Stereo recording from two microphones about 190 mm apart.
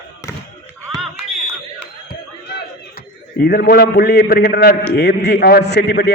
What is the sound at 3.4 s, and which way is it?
A man's voice, 55° left (ahead or behind).